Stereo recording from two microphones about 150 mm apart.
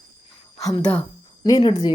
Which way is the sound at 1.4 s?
25° left (ahead or behind).